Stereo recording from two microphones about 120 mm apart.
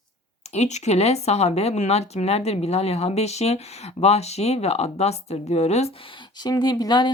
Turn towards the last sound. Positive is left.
turn(degrees=35)  # may be behind; listen again after turning